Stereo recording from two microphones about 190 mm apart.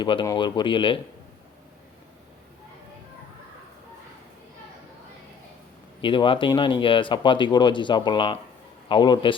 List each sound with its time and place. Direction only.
0.0 s speech: 25° left (ahead or behind)
6.0 s speech: 25° left (ahead or behind)